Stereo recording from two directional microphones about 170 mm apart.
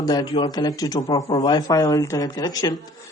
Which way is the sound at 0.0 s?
25° left (ahead or behind).